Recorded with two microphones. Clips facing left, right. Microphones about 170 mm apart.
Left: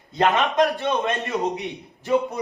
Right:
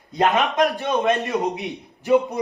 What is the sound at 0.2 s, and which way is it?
A man's voice, 15° right (ahead or behind).